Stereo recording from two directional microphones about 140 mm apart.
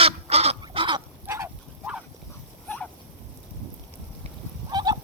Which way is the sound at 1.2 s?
15° right (ahead or behind).